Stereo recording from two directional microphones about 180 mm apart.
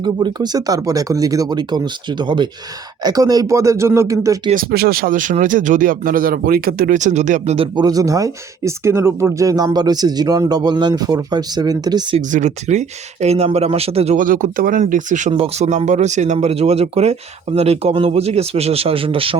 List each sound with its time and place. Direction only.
0.0 s speech: 20° right (ahead or behind)
4.5 s speech: 60° right (ahead or behind); by 12.2 s 25° right (ahead or behind)
12.3 s speech: 40° right (ahead or behind)
15.3 s speech: 35° right (ahead or behind)